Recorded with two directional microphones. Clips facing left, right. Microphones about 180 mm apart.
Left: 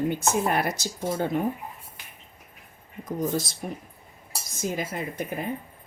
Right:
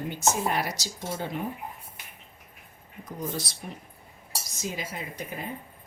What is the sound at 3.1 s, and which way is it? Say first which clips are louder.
A woman's voice: left 7 dB; 50° left (ahead or behind).